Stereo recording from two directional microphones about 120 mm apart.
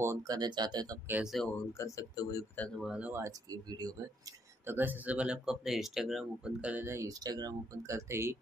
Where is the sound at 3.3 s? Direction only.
35° right (ahead or behind).